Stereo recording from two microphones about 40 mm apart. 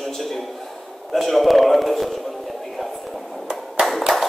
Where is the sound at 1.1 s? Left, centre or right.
Centre.